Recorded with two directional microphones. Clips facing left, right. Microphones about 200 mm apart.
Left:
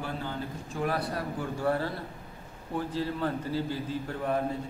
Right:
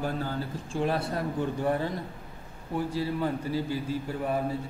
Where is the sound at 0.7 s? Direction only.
25° right (ahead or behind).